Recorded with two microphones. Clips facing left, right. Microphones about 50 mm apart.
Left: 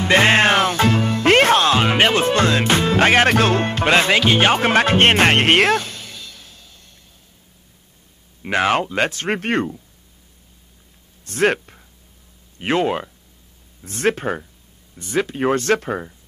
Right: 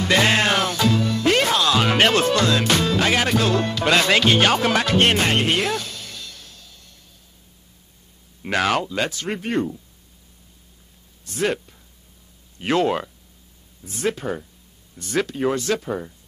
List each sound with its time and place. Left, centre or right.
0.0 s music: left
1.8 s music: centre
2.2 s music: left
3.0 s speech: left
4.1 s music: centre
4.4 s speech: left
5.8 s music: left
6.0 s music: centre
8.4 s speech: left
11.2 s speech: left
12.5 s speech: left
13.8 s speech: left
15.0 s speech: left
15.3 s speech: left